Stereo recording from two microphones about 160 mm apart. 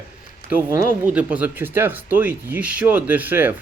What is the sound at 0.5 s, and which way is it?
Speech, 15° right (ahead or behind).